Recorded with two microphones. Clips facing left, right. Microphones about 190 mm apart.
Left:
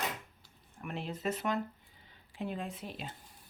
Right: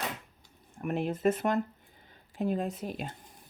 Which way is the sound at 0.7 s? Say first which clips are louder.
Right 9 dB; 45° right (ahead or behind).